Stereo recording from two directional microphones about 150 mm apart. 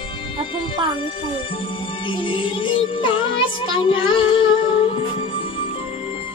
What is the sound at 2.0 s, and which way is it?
Music, 35° left (ahead or behind).